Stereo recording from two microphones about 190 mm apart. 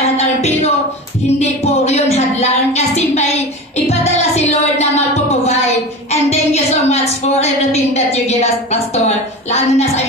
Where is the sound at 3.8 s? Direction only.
35° left (ahead or behind).